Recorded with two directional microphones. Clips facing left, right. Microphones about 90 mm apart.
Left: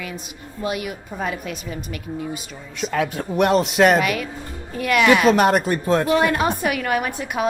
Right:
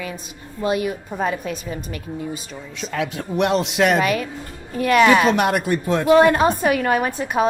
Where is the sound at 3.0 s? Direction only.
45° left (ahead or behind).